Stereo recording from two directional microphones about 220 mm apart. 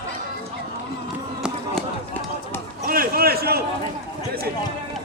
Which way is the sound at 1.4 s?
5° right (ahead or behind).